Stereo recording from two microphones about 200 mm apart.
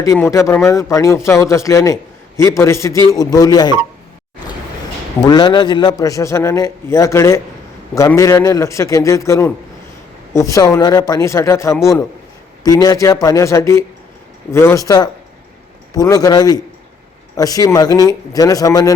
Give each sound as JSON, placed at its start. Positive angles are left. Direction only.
{"t": 0.0, "sound": "a man's voice", "side_deg": 15}
{"t": 5.2, "sound": "a man's voice", "side_deg": 20}